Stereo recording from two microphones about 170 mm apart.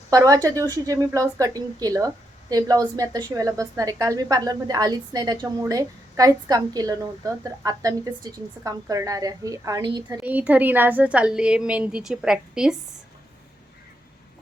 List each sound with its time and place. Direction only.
0.1 s a woman's voice: 20° right (ahead or behind)
10.2 s a woman's voice: 10° right (ahead or behind)